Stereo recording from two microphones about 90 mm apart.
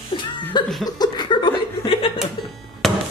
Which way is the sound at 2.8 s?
Centre (ahead or behind).